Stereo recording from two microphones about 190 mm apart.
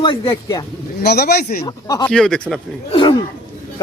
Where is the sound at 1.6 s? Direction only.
20° left (ahead or behind).